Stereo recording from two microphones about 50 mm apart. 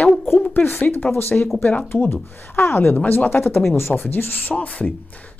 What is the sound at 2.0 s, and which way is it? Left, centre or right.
Speech, left.